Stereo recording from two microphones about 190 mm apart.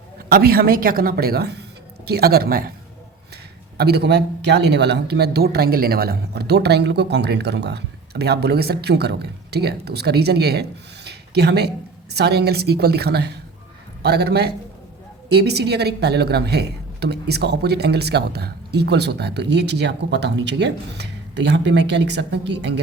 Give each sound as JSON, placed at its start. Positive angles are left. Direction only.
{"t": 0.3, "sound": "speech", "side_deg": -50}
{"t": 3.8, "sound": "speech", "side_deg": -60}